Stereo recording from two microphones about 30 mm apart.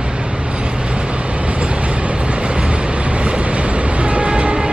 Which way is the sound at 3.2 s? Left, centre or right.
Right.